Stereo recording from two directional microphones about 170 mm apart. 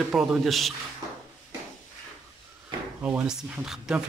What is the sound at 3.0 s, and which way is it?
Speech, 10° right (ahead or behind).